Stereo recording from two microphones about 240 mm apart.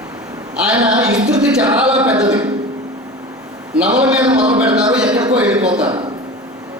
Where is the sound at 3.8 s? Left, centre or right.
Centre.